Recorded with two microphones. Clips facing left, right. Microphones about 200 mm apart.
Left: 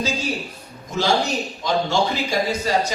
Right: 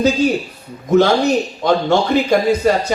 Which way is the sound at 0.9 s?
60° right (ahead or behind).